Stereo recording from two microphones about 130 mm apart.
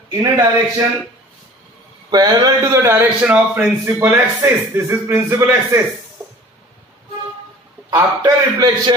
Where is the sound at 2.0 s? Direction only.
30° right (ahead or behind).